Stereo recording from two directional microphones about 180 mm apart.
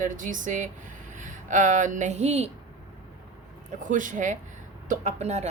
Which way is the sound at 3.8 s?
45° right (ahead or behind).